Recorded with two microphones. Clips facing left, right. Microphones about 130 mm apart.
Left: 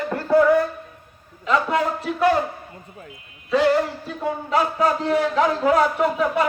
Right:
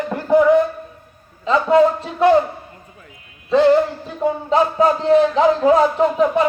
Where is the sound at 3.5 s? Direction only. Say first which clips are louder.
Right 5 dB; 25° right (ahead or behind).